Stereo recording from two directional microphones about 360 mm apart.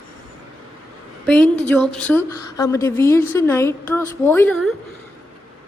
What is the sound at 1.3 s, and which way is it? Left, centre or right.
A woman's voice, centre.